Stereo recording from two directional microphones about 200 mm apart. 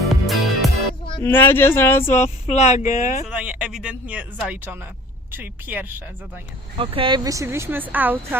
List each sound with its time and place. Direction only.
0.1 s music: centre (ahead or behind)
1.2 s speech: 10° left (ahead or behind)
2.1 s speech: 35° left (ahead or behind)
3.2 s speech: 5° right (ahead or behind)
6.7 s speech: 25° right (ahead or behind); by 8.4 s 10° right (ahead or behind)